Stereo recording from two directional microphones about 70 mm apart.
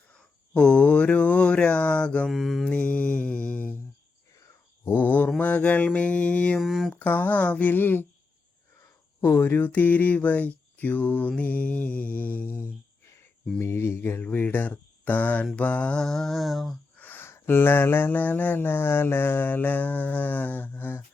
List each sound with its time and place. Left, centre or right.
0.1 s mantra: centre
2.3 s mantra: centre
2.6 s mantra: centre
4.9 s mantra: left
6.6 s a sound: centre
6.9 s mantra: left
9.2 s mantra: left
13.6 s speech: left
15.5 s mantra: centre
17.0 s a sound: left
17.3 s mantra: left